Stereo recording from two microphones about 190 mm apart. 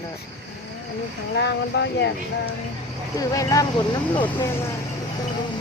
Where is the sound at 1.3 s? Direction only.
65° left (ahead or behind).